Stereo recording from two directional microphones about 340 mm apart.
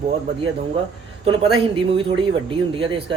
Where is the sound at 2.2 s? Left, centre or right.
Centre.